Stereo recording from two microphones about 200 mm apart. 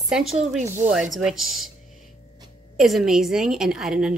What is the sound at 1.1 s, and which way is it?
Speech, centre (ahead or behind).